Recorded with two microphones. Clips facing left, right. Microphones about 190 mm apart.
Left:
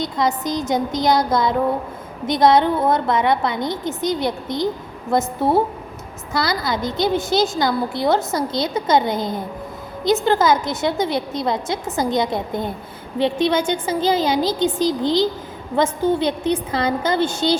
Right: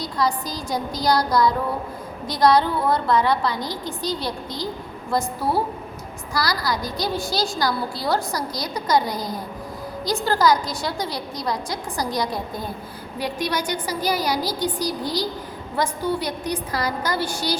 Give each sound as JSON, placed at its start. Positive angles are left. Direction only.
{"t": 0.0, "sound": "a woman's voice", "side_deg": 20}